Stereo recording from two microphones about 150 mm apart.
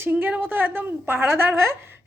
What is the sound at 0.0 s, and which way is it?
A woman's voice, 15° right (ahead or behind).